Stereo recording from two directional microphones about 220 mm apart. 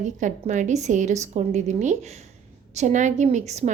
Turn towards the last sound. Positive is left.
turn(degrees=-30)  # may be behind; listen again after turning